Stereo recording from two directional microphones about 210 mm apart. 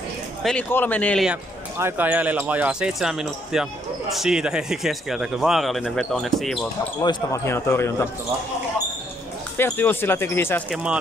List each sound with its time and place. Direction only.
0.4 s speech: 5° left (ahead or behind)
7.0 s speech: 15° left (ahead or behind)
9.6 s speech: 10° left (ahead or behind)
10.7 s speech: 5° right (ahead or behind)